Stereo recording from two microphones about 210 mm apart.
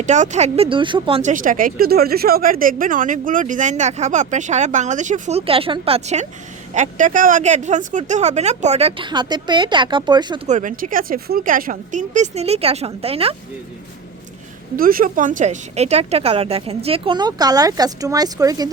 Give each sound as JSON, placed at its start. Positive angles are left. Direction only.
{"t": 0.0, "sound": "speech", "side_deg": -35}
{"t": 10.4, "sound": "speech", "side_deg": -35}
{"t": 14.8, "sound": "speech", "side_deg": -45}